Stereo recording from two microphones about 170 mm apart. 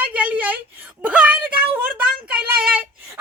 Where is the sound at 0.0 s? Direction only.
10° right (ahead or behind).